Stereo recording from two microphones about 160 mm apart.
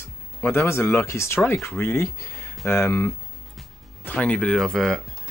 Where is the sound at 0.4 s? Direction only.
15° left (ahead or behind).